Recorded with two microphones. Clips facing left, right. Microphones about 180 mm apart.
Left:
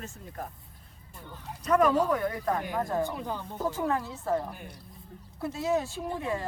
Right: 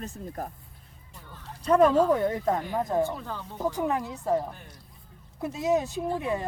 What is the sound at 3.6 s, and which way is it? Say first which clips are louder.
A woman's voice: right 2 dB; 15° right (ahead or behind).